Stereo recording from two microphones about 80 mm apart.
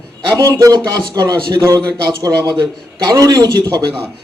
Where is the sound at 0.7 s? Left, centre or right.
Right.